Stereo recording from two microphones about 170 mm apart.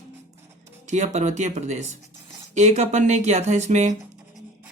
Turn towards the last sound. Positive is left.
turn(degrees=-45)  # may be behind; listen again after turning